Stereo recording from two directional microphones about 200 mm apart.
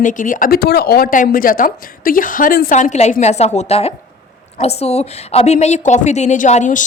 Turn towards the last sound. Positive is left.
turn(degrees=40)  # may be behind; listen again after turning